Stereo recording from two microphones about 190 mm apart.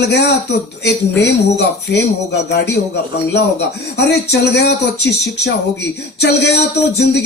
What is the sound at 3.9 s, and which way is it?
A man's voice, 65° left (ahead or behind).